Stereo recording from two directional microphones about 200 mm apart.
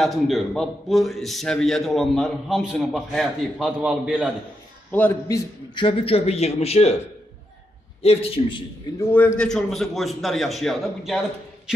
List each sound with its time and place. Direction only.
0.0 s a man's voice: centre (ahead or behind)
4.9 s a man's voice: 10° left (ahead or behind)
5.8 s a man's voice: 25° left (ahead or behind)
8.0 s a man's voice: 30° left (ahead or behind)
9.1 s a man's voice: 5° left (ahead or behind)